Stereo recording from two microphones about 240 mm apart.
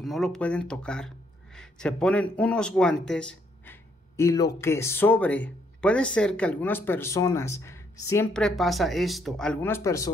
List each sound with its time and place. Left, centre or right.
0.0 s speech: centre